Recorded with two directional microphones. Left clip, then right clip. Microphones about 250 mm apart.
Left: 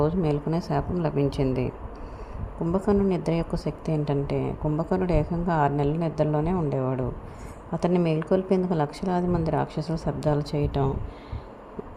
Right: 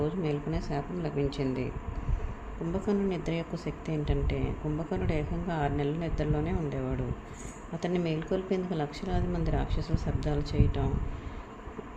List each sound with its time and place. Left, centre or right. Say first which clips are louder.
0.0 s a woman's voice: left 7 dB; left
2.7 s a woman's voice: left 7 dB; left